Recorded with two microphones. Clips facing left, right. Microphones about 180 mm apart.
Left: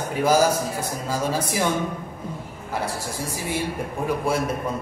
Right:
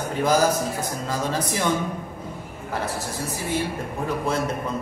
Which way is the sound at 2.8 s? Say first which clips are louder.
Even; 10° left (ahead or behind).